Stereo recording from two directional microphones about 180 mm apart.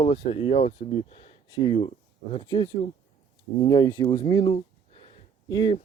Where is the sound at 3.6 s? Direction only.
25° left (ahead or behind).